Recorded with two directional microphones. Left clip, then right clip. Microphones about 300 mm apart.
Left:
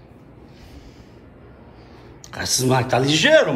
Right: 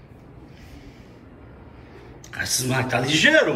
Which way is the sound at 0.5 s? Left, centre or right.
Centre.